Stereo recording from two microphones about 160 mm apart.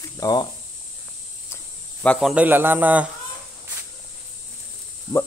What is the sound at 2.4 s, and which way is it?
Speech, 10° right (ahead or behind).